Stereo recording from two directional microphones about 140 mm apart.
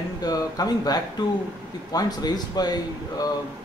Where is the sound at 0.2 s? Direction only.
25° left (ahead or behind).